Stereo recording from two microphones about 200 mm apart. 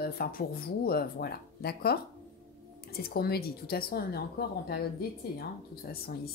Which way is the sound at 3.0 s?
50° left (ahead or behind).